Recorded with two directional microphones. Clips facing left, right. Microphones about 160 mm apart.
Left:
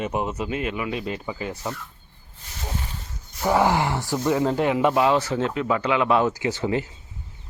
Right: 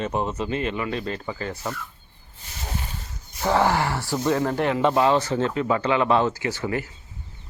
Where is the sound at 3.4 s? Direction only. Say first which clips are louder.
Left 1 dB; 15° left (ahead or behind).